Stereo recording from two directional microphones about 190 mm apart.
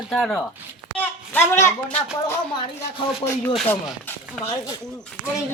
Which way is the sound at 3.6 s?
5° left (ahead or behind).